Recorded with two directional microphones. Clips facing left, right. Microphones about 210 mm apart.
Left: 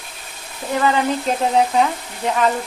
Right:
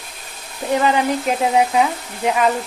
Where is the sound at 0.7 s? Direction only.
20° right (ahead or behind).